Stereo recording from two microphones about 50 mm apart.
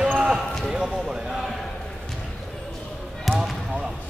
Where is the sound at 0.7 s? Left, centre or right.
Centre.